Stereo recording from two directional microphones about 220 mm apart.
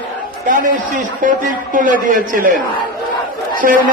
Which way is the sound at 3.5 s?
40° right (ahead or behind).